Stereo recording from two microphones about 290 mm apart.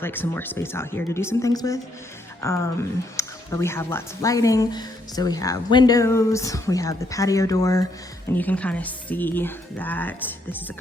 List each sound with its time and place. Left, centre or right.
0.0 s speech: centre